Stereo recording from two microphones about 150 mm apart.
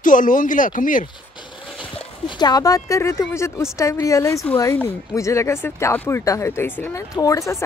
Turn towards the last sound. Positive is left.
turn(degrees=20)  # may be behind; listen again after turning